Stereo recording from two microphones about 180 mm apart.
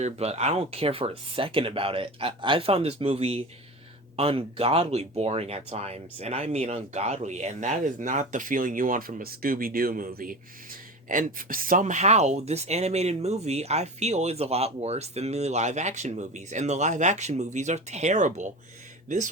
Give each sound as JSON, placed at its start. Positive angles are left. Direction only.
{"t": 0.0, "sound": "speech", "side_deg": -35}